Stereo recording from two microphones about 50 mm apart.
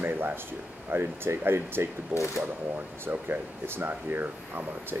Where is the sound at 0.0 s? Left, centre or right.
Right.